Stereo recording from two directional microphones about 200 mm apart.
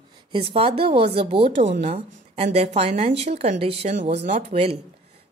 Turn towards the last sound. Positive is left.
turn(degrees=-30)  # may be behind; listen again after turning